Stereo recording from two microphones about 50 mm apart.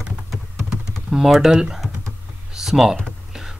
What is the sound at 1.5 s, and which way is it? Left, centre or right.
Speech, centre.